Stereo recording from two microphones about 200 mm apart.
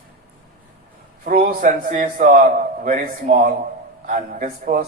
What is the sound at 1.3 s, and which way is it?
A man's voice, 45° right (ahead or behind).